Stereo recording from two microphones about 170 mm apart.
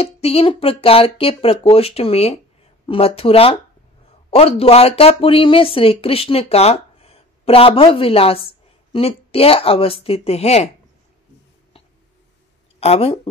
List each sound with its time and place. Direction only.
0.0 s speech: 35° left (ahead or behind)
12.8 s speech: 35° left (ahead or behind)